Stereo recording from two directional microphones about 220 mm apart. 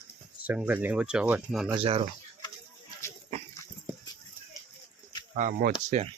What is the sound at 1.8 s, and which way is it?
Speech, 25° right (ahead or behind).